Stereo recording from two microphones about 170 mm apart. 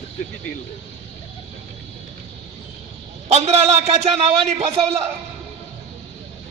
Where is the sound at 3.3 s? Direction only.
40° right (ahead or behind).